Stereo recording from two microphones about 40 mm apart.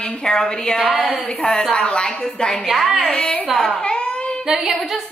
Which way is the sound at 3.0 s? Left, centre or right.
Centre.